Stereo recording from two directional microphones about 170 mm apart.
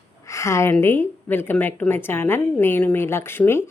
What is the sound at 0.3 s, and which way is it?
Speech, 15° left (ahead or behind).